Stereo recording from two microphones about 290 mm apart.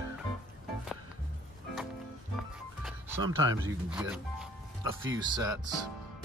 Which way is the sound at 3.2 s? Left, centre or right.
Centre.